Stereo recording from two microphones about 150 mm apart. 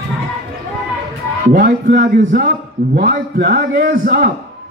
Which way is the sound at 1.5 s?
70° right (ahead or behind).